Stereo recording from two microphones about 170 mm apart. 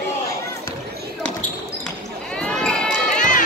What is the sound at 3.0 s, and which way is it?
Run, 50° left (ahead or behind).